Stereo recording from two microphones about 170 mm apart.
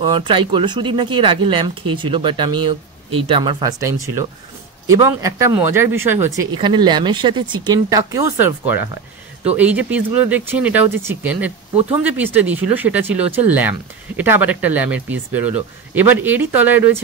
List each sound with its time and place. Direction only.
0.0 s speech: 25° right (ahead or behind); by 17.0 s 10° right (ahead or behind)